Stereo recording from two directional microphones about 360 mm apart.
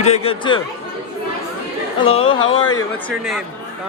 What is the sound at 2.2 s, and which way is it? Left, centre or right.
Speech, left.